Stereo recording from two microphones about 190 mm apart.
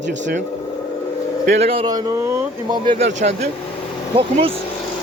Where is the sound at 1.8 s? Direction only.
20° right (ahead or behind).